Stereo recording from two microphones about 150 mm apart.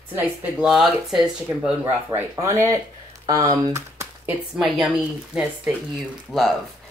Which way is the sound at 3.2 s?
25° right (ahead or behind).